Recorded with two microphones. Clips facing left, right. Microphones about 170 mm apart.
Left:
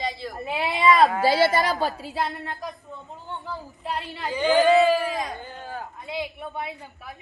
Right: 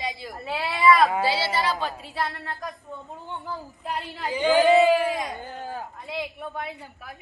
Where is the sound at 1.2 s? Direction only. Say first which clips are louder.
Left 5 dB; 45° left (ahead or behind).